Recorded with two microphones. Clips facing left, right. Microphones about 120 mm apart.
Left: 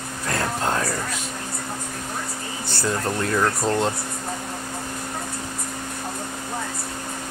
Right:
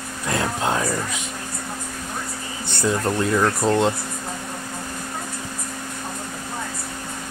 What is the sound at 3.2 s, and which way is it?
Speech, 5° right (ahead or behind).